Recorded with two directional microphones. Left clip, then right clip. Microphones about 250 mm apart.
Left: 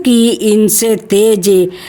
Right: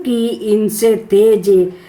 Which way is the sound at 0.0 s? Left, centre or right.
Left.